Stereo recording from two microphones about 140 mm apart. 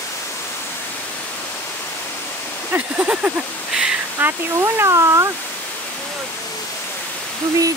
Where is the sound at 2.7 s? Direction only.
10° right (ahead or behind).